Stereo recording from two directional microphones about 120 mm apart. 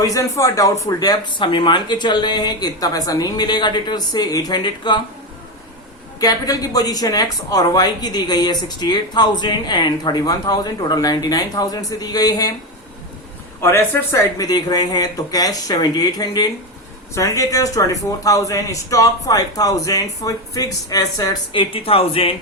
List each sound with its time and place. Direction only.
0.0 s speech: 25° left (ahead or behind)
6.1 s speech: 30° left (ahead or behind)
13.6 s a man's voice: 20° left (ahead or behind); by 22.4 s 50° left (ahead or behind)